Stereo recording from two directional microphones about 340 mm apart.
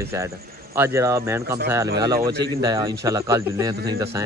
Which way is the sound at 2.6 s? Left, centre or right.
Centre.